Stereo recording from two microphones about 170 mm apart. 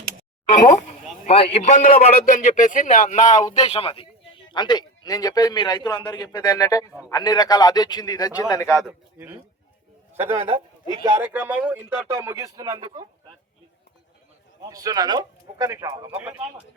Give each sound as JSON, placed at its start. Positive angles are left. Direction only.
{"t": 1.3, "sound": "speech", "side_deg": 35}
{"t": 1.6, "sound": "a man's voice", "side_deg": 50}
{"t": 8.7, "sound": "speech", "side_deg": -5}
{"t": 10.3, "sound": "a man's voice", "side_deg": -35}
{"t": 11.0, "sound": "speech", "side_deg": -10}
{"t": 14.7, "sound": "speech", "side_deg": -20}